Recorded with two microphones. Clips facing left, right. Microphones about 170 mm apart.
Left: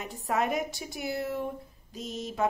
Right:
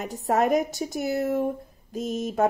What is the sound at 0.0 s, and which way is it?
A woman's voice, 45° right (ahead or behind).